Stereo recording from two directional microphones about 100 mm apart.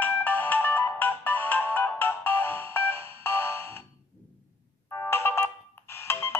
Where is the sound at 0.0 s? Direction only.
20° left (ahead or behind).